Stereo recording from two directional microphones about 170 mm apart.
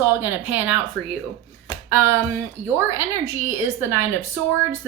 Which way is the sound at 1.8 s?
15° right (ahead or behind).